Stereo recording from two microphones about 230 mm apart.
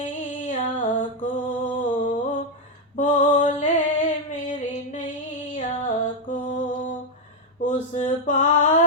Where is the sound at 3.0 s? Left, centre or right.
Left.